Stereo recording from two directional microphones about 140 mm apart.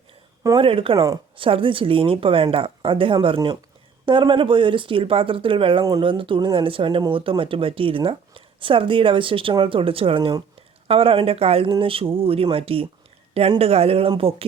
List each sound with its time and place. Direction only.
0.4 s speech: 35° right (ahead or behind)
5.8 s speech: 25° right (ahead or behind)
6.1 s speech: 40° right (ahead or behind)